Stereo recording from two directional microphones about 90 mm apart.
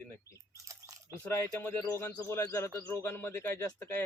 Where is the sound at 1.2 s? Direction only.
20° left (ahead or behind).